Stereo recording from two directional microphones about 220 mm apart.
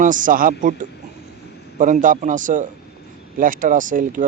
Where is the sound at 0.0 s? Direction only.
35° right (ahead or behind).